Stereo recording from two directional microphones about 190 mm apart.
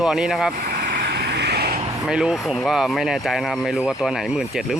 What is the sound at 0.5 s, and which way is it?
Vehicle, 50° right (ahead or behind).